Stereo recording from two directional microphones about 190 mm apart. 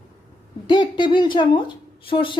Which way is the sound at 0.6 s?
25° left (ahead or behind).